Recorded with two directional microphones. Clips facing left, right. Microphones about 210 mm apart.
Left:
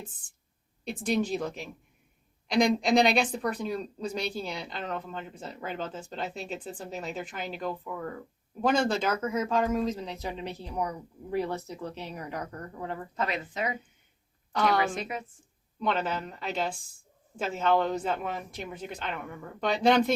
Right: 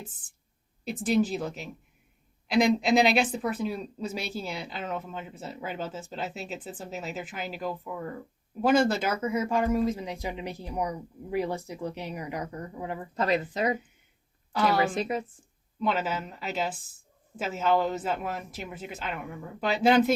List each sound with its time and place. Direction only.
1.0 s a woman's voice: 5° right (ahead or behind)
13.1 s speech: 35° right (ahead or behind)
14.5 s a woman's voice: 5° right (ahead or behind)
14.9 s speech: 35° right (ahead or behind)
15.8 s a woman's voice: 5° right (ahead or behind)